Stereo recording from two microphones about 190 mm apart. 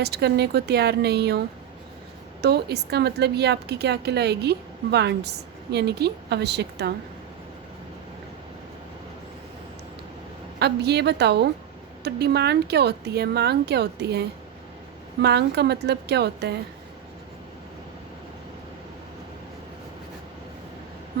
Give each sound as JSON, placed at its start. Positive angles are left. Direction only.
{"t": 0.0, "sound": "a woman's voice", "side_deg": -60}
{"t": 2.4, "sound": "a woman's voice", "side_deg": -60}
{"t": 10.6, "sound": "a woman's voice", "side_deg": -60}